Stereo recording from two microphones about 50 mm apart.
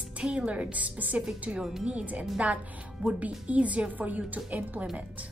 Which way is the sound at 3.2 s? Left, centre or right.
Right.